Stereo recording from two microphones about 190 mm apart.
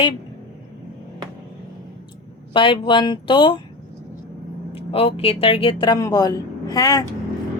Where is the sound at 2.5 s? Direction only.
25° left (ahead or behind).